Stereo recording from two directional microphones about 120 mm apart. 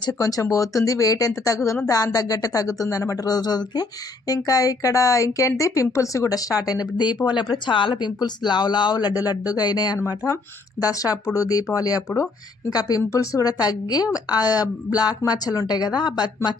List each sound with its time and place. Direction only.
0.0 s speech: 30° left (ahead or behind)